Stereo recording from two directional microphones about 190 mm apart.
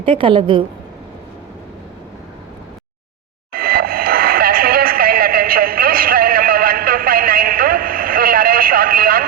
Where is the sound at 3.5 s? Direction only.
50° right (ahead or behind).